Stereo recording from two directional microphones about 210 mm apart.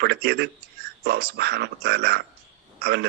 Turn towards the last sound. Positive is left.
turn(degrees=-50)  # may be behind; listen again after turning